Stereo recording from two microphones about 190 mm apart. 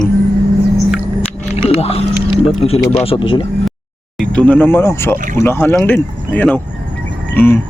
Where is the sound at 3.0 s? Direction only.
30° left (ahead or behind).